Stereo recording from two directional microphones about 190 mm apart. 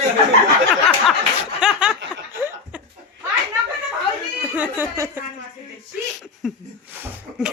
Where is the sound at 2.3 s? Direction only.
10° right (ahead or behind).